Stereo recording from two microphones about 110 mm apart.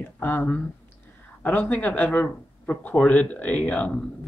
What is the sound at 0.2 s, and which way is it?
Speech, 15° left (ahead or behind).